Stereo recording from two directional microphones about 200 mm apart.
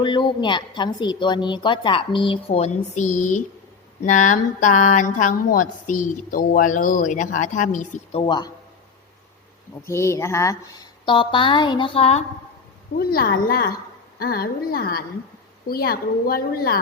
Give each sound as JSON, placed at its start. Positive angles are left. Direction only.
{"t": 0.0, "sound": "a woman's voice", "side_deg": 25}
{"t": 8.2, "sound": "a woman's voice", "side_deg": 20}
{"t": 9.8, "sound": "a woman's voice", "side_deg": 15}
{"t": 13.0, "sound": "a woman's voice", "side_deg": 45}